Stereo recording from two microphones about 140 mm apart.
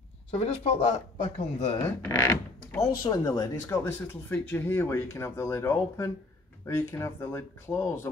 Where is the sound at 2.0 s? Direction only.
15° left (ahead or behind).